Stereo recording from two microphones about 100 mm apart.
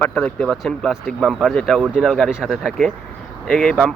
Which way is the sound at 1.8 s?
5° right (ahead or behind).